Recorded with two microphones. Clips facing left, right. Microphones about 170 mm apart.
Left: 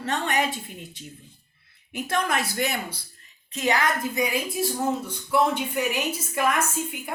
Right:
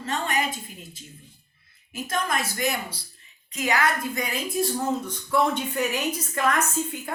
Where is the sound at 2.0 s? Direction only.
70° left (ahead or behind).